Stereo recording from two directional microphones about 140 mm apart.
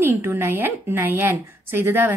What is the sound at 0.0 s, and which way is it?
A woman's voice, 15° right (ahead or behind).